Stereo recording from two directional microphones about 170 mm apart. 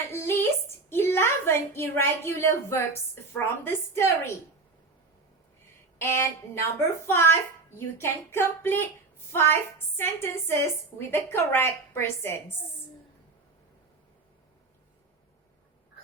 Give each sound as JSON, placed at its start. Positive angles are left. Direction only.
{"t": 0.1, "sound": "a sound", "side_deg": 15}
{"t": 0.9, "sound": "a woman's voice", "side_deg": 15}
{"t": 6.0, "sound": "a woman's voice", "side_deg": 15}